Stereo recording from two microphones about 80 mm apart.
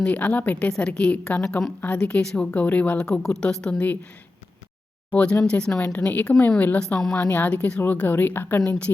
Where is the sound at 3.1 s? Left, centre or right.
Centre.